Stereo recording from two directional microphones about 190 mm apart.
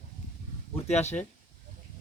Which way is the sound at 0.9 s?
35° left (ahead or behind).